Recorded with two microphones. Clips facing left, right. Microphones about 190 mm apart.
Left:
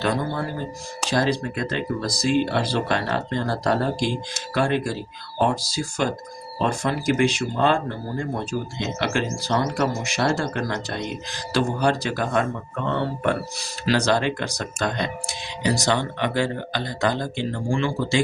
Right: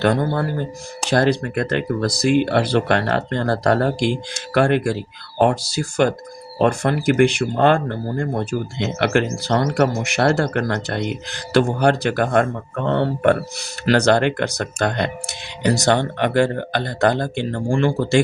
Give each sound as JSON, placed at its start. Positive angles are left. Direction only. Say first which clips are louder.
{"t": 0.0, "sound": "speech", "louder": "right 6 dB", "side_deg": -55}